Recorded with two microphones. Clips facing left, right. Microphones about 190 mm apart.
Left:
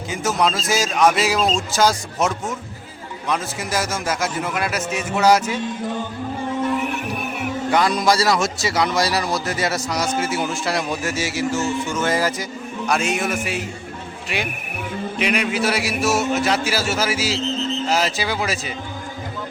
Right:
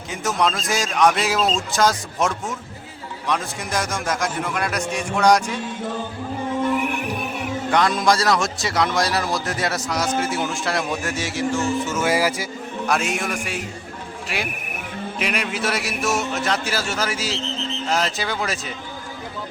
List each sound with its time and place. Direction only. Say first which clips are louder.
0.1 s a man's voice: left 1 dB; centre (ahead or behind)
7.7 s a man's voice: left 1 dB; centre (ahead or behind)